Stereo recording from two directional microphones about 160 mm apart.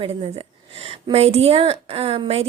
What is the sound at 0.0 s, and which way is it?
Speech, 35° right (ahead or behind).